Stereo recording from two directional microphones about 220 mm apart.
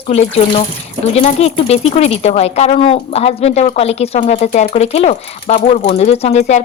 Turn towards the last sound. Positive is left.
turn(degrees=30)  # may be behind; listen again after turning